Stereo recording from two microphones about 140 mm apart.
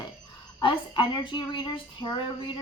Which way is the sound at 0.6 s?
35° left (ahead or behind).